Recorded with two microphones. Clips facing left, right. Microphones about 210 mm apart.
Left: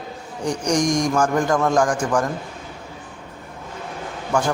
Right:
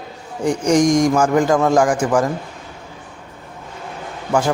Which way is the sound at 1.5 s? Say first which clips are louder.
Right 4 dB; 20° right (ahead or behind).